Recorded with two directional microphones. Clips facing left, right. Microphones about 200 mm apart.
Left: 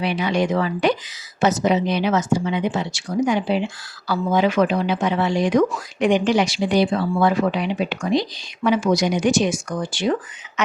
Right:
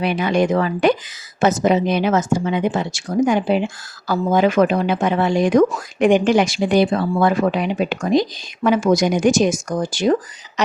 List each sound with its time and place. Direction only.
0.0 s speech: 50° right (ahead or behind)